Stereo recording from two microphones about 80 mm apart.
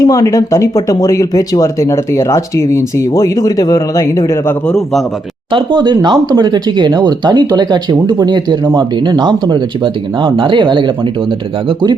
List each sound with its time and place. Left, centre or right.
0.0 s speech: left
5.5 s speech: right